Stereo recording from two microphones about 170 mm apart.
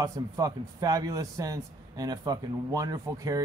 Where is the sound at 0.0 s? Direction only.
20° right (ahead or behind).